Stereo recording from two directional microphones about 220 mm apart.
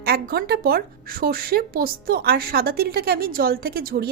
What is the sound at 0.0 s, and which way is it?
A woman's voice, 45° right (ahead or behind).